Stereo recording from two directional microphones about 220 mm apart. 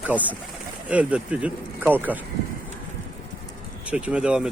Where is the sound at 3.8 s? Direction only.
5° right (ahead or behind).